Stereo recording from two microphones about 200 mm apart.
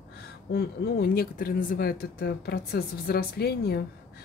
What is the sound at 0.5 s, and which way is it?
Speech, 50° left (ahead or behind).